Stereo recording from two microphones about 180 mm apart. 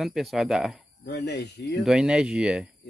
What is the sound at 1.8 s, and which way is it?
Speech, 5° right (ahead or behind).